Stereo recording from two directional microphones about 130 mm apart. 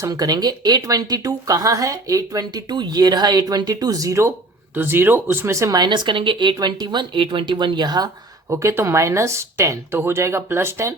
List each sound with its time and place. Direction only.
0.0 s speech: 30° right (ahead or behind)